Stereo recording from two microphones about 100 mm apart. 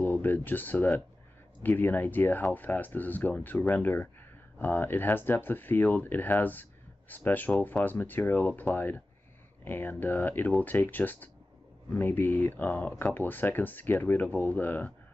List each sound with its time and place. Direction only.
0.0 s speech: 20° left (ahead or behind)